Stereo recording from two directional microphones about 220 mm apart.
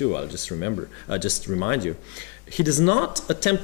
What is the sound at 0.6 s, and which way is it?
Speech, 15° left (ahead or behind).